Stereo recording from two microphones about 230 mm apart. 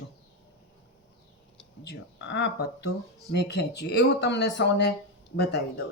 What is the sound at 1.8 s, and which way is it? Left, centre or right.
Speech, left.